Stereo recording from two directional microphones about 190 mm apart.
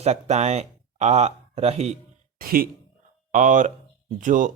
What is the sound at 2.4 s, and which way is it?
Speech, 50° right (ahead or behind).